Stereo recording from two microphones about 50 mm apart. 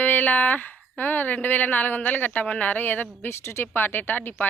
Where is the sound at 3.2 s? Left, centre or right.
Left.